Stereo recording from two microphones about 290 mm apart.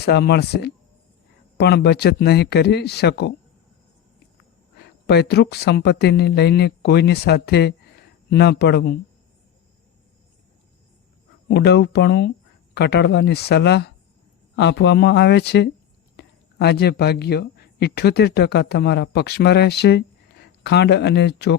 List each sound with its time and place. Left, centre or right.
0.0 s speech: left
4.8 s speech: left
11.4 s speech: left